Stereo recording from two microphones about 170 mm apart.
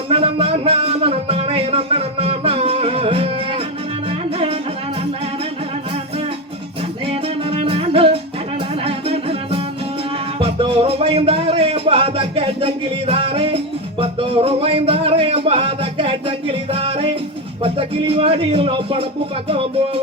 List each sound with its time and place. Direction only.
0.1 s music: 35° right (ahead or behind)
7.1 s music: 35° right (ahead or behind)
17.6 s speech: 35° right (ahead or behind)